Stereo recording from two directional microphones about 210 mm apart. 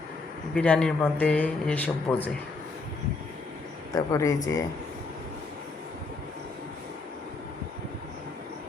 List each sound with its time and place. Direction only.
0.5 s speech: 5° left (ahead or behind)
3.9 s a man's voice: 15° left (ahead or behind)